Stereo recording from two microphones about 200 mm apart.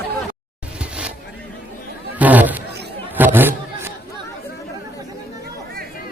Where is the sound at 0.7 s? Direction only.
5° right (ahead or behind).